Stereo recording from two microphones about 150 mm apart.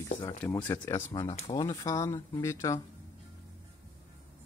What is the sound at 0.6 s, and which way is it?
Speech, 25° left (ahead or behind).